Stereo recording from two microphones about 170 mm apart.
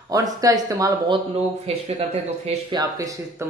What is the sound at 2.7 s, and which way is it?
Speech, 20° right (ahead or behind).